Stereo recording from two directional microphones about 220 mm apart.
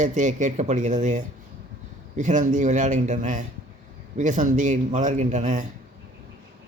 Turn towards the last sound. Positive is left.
turn(degrees=-35)  # may be behind; listen again after turning